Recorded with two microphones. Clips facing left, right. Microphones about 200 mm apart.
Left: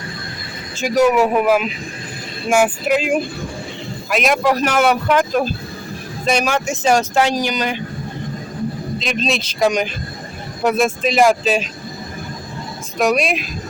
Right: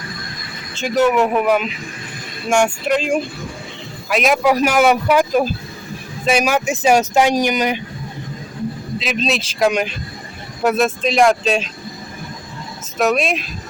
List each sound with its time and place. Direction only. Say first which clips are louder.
0.8 s speech: left 1 dB; 10° left (ahead or behind); by 7.8 s 20° right (ahead or behind)
9.0 s speech: right 1 dB; centre (ahead or behind)
13.0 s speech: even; centre (ahead or behind)